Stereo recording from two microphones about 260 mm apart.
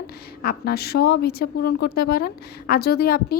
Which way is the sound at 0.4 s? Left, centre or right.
Left.